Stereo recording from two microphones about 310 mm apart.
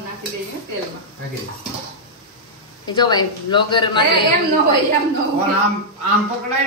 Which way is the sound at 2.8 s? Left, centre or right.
Centre.